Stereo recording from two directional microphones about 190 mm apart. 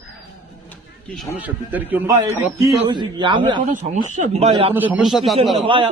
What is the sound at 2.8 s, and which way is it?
Speech, 25° right (ahead or behind).